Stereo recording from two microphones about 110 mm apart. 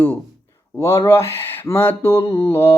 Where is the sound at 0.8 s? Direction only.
25° left (ahead or behind).